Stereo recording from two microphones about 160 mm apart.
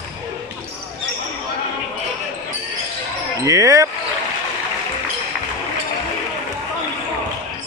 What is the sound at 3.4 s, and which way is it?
Speech, 20° right (ahead or behind).